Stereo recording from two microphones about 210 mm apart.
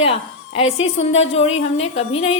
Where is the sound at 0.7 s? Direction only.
65° left (ahead or behind).